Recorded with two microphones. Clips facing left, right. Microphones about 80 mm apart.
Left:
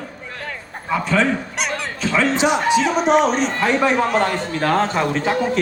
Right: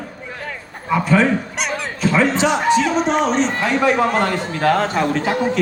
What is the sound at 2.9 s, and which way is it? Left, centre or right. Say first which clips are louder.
Speech: left 2 dB; left.